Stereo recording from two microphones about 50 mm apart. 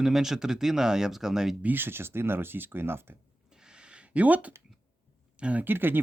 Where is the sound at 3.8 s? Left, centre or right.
Right.